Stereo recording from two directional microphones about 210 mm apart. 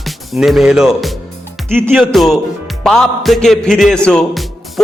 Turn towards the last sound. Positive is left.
turn(degrees=0)  # may be behind; listen again after turning